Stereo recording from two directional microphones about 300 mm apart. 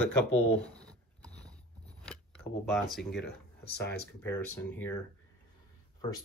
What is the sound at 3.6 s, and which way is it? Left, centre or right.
Speech, left.